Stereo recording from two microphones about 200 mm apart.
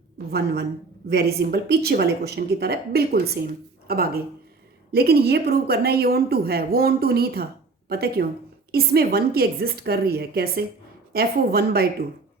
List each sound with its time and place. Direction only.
0.3 s a woman's voice: 50° right (ahead or behind)